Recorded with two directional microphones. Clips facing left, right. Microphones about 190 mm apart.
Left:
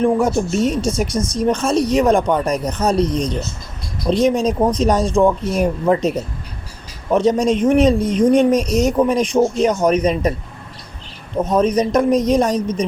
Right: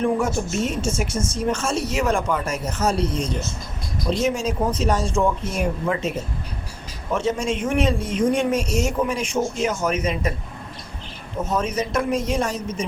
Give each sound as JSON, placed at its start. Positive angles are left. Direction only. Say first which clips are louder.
{"t": 0.0, "sound": "speech", "louder": "left 6 dB", "side_deg": 35}
{"t": 11.4, "sound": "speech", "louder": "left 8 dB", "side_deg": 35}